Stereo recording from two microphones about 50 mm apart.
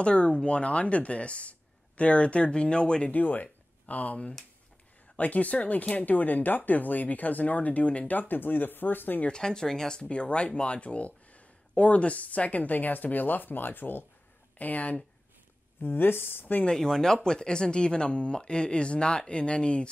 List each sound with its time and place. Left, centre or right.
0.0 s speech: left
3.1 s speech: left
9.3 s speech: centre; by 16.6 s left
16.6 s speech: centre